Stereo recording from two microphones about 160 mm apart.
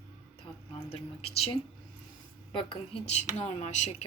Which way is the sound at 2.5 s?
30° left (ahead or behind).